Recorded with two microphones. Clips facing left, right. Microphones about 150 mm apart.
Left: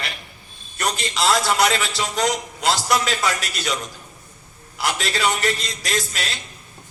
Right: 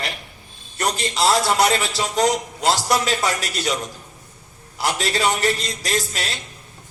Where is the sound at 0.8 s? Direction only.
30° right (ahead or behind).